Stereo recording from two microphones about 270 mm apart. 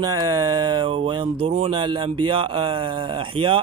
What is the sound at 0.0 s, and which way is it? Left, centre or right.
Speech, centre.